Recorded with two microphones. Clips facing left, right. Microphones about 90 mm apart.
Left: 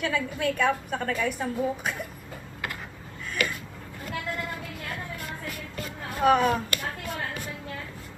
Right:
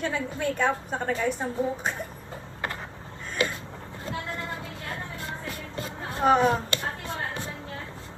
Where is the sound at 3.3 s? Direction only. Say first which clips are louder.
Right 2 dB; 25° right (ahead or behind).